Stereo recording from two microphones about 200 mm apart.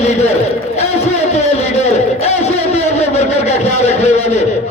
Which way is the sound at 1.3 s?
35° left (ahead or behind).